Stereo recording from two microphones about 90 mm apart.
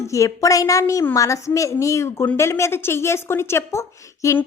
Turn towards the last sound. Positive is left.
turn(degrees=30)  # may be behind; listen again after turning